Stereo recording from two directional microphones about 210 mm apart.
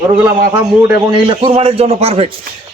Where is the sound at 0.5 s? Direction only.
25° right (ahead or behind).